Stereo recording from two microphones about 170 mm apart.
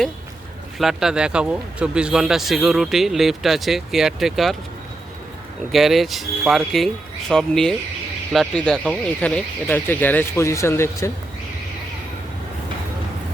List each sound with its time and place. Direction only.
0.8 s speech: centre (ahead or behind)
5.7 s speech: centre (ahead or behind); by 11.1 s 15° left (ahead or behind)